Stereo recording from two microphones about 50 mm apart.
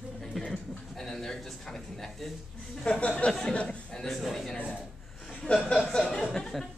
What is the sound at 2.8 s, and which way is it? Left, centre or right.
Speech, left.